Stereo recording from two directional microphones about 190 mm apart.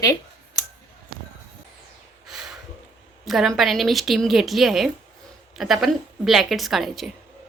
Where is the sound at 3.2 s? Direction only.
Centre (ahead or behind).